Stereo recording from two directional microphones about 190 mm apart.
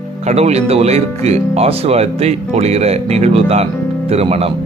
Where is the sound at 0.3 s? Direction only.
35° right (ahead or behind).